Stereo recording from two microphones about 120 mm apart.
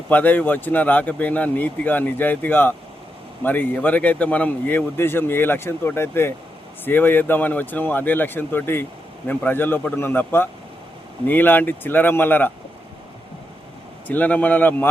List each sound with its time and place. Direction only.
0.1 s speech: 15° left (ahead or behind)
14.1 s speech: 15° left (ahead or behind)